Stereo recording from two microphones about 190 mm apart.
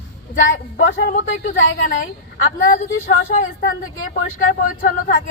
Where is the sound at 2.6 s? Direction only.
45° left (ahead or behind).